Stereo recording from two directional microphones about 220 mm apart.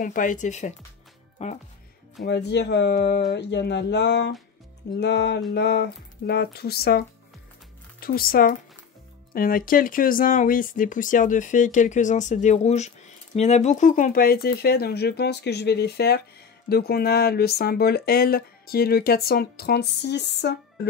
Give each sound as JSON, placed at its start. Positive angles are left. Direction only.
{"t": 0.0, "sound": "speech", "side_deg": 35}
{"t": 2.2, "sound": "speech", "side_deg": 50}